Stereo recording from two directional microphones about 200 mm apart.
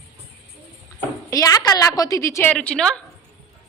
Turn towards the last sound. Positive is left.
turn(degrees=5)  # may be behind; listen again after turning